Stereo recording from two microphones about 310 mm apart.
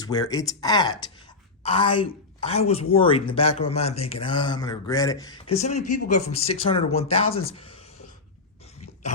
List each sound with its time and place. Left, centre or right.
0.0 s a woman's voice: centre